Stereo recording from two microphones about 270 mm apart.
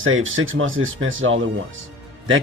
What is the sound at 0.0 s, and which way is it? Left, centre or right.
Speech, right.